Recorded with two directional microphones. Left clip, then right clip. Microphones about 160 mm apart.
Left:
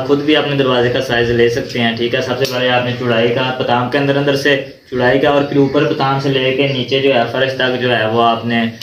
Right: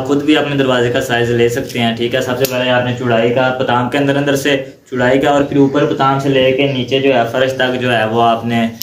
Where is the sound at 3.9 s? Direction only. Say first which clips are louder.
Even; 25° right (ahead or behind).